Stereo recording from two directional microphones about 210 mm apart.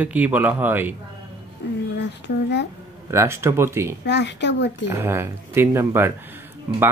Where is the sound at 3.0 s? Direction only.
15° right (ahead or behind).